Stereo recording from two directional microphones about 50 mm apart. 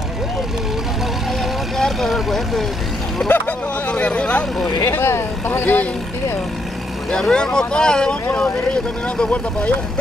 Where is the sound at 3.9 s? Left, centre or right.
Left.